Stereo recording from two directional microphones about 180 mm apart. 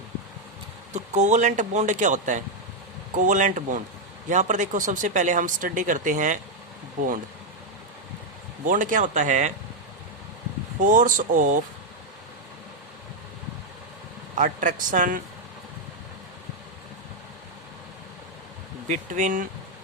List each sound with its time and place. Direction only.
0.9 s speech: 40° right (ahead or behind)
8.6 s speech: 45° right (ahead or behind)
10.8 s speech: 45° right (ahead or behind)
14.3 s speech: 45° right (ahead or behind)
18.9 s speech: 45° right (ahead or behind)